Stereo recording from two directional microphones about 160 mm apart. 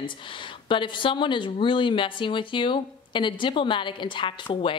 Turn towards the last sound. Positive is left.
turn(degrees=35)  # may be behind; listen again after turning